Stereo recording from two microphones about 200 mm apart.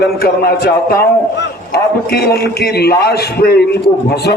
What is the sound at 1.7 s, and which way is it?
A man's voice, 50° left (ahead or behind).